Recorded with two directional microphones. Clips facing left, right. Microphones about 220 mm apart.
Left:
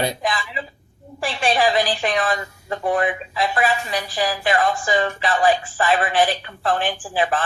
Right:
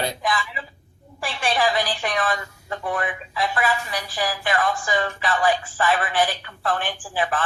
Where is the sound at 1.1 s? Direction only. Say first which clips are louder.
Left 3 dB; 25° left (ahead or behind).